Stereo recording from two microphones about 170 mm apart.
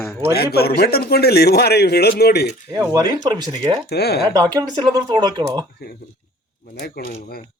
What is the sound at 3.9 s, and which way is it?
Speech, 70° left (ahead or behind).